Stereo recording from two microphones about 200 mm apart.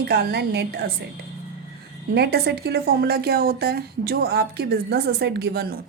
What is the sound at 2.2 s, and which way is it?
Speech, 55° right (ahead or behind).